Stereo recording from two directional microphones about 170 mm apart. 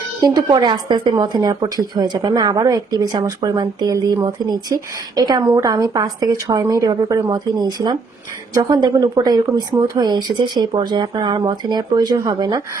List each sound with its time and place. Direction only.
0.2 s speech: 20° right (ahead or behind)